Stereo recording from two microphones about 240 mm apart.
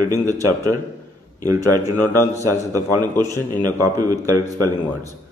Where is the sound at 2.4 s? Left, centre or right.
Centre.